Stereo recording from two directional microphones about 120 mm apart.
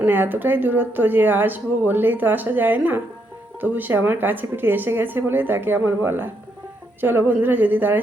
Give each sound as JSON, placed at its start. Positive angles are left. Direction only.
{"t": 0.0, "sound": "speech", "side_deg": -15}